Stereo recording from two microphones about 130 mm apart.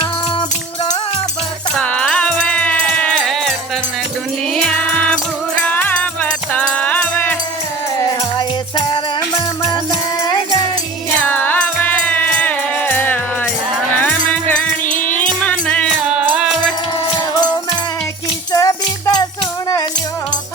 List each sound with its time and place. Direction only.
1.7 s music: 10° left (ahead or behind)
5.6 s music: 10° left (ahead or behind)
8.4 s music: 40° left (ahead or behind)
11.2 s music: 10° left (ahead or behind)
14.8 s music: 85° left
15.3 s music: 10° left (ahead or behind)
16.0 s music: 10° right (ahead or behind)
18.5 s music: 25° left (ahead or behind)